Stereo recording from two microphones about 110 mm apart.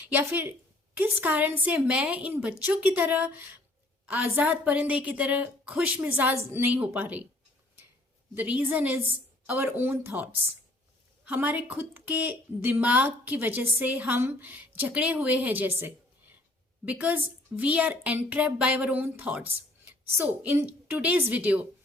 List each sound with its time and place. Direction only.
0.1 s a woman's voice: 20° right (ahead or behind)
8.4 s a woman's voice: 15° right (ahead or behind)
11.3 s a woman's voice: 15° right (ahead or behind)